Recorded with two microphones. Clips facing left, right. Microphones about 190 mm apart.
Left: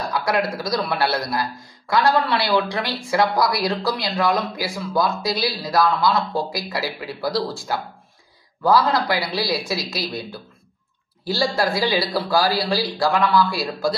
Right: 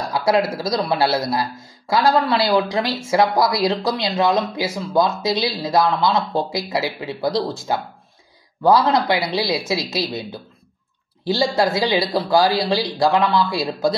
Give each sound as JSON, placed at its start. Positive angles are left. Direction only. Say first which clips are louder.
{"t": 0.1, "sound": "speech", "louder": "right 5 dB", "side_deg": -25}